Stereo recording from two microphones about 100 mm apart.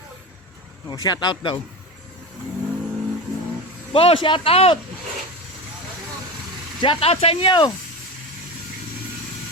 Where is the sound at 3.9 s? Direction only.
65° left (ahead or behind).